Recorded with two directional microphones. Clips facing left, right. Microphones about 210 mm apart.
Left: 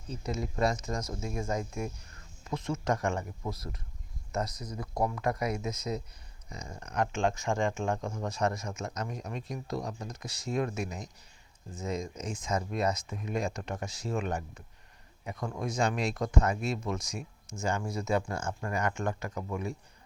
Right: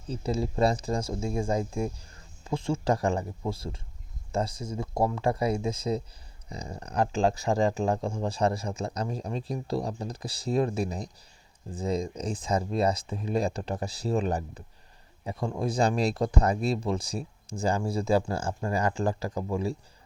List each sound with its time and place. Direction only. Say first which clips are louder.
0.1 s speech: right 6 dB; 30° right (ahead or behind)